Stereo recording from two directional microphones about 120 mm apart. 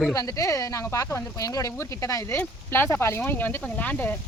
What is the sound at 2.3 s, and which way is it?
Speech, 15° left (ahead or behind).